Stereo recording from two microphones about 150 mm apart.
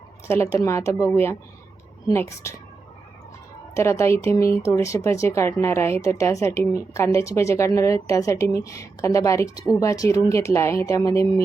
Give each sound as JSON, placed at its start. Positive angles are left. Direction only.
{"t": 0.6, "sound": "speech", "side_deg": 20}
{"t": 3.8, "sound": "speech", "side_deg": 20}